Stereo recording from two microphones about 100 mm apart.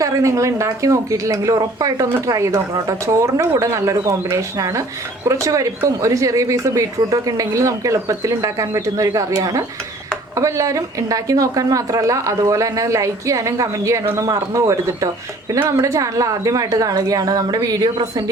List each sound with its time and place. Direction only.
0.0 s a woman's voice: 35° right (ahead or behind)